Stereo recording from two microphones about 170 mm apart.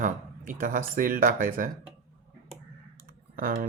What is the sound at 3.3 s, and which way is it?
Speech, 55° right (ahead or behind).